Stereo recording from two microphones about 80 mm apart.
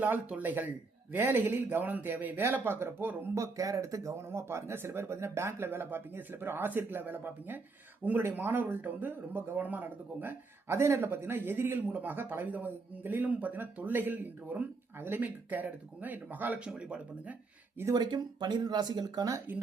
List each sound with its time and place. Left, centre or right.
0.0 s speech: right
3.3 s speech: right; by 17.3 s centre
17.9 s speech: right